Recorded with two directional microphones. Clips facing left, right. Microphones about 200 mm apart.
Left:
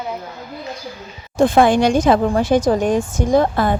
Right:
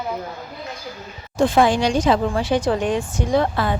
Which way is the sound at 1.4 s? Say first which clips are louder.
Left 4 dB; 50° left (ahead or behind).